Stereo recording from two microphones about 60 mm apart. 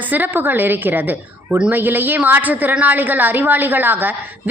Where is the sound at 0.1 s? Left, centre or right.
Right.